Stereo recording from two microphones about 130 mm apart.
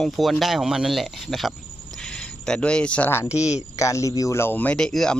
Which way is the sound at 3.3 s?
5° right (ahead or behind).